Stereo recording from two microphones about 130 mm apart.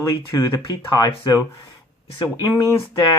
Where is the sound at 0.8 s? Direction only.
35° left (ahead or behind).